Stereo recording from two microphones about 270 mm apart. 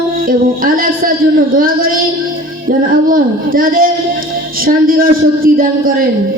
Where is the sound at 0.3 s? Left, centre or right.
Right.